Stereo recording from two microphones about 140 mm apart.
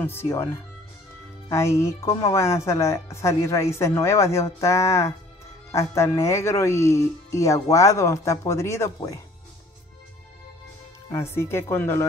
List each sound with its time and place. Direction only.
0.0 s speech: 15° left (ahead or behind)
1.5 s speech: 20° left (ahead or behind)
11.1 s speech: 20° left (ahead or behind)